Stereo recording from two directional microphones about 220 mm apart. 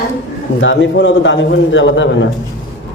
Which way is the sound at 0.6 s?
55° left (ahead or behind).